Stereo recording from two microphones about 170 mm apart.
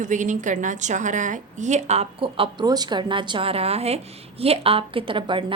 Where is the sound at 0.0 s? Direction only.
45° right (ahead or behind).